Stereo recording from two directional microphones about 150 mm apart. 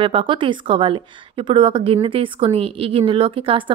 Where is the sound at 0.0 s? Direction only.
35° right (ahead or behind).